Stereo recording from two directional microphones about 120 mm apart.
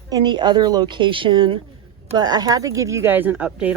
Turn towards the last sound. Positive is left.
turn(degrees=-10)  # may be behind; listen again after turning